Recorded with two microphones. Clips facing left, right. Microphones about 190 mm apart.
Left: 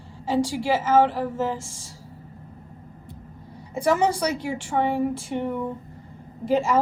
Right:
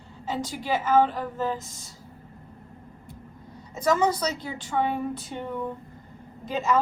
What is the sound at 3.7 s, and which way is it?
Speech, 30° left (ahead or behind).